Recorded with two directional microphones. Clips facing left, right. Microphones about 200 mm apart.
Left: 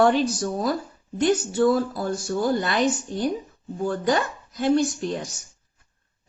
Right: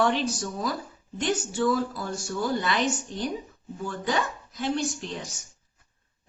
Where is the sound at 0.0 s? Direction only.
45° left (ahead or behind).